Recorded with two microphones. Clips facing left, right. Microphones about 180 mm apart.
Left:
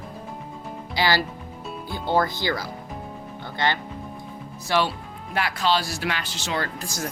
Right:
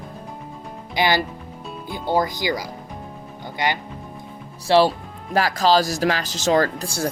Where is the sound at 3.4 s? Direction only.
15° right (ahead or behind).